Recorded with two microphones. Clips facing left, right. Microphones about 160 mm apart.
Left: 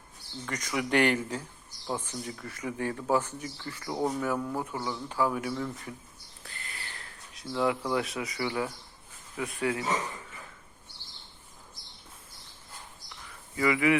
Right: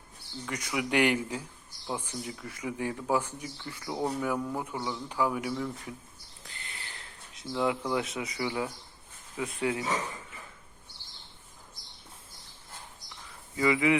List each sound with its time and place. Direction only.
0.4 s speech: 10° right (ahead or behind)
6.4 s a sound: 20° right (ahead or behind)
7.9 s speech: 20° right (ahead or behind)
13.6 s speech: 20° right (ahead or behind)